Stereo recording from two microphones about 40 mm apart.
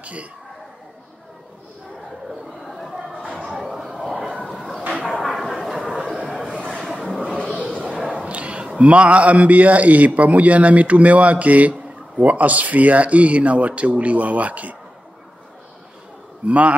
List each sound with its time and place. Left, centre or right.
0.0 s a man's voice: right
3.6 s a sound: centre
8.3 s a man's voice: right
16.4 s a man's voice: right